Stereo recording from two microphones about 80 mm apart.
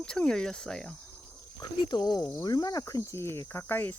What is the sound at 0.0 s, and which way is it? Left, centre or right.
Speech, centre.